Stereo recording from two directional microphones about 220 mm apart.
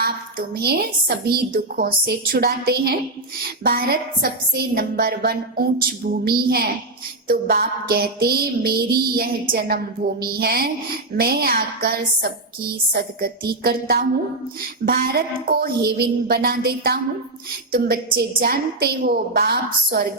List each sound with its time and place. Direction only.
0.0 s a woman's voice: 45° right (ahead or behind)